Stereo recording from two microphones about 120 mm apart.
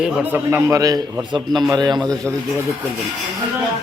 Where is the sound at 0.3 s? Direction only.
25° right (ahead or behind).